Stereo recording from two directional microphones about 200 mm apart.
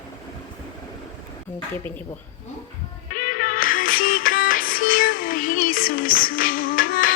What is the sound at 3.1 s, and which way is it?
Music, 40° left (ahead or behind).